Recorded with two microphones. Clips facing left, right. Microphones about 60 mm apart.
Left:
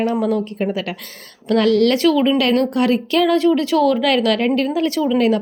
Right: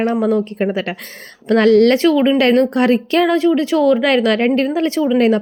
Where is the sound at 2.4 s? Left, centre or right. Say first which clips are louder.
Right 3 dB; right.